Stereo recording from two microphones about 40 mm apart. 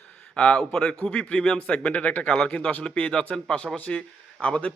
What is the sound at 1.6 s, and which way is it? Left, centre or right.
A man's voice, left.